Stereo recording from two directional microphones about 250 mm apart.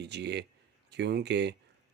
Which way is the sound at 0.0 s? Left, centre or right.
Right.